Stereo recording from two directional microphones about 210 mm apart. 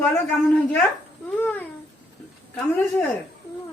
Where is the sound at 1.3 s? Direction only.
10° left (ahead or behind).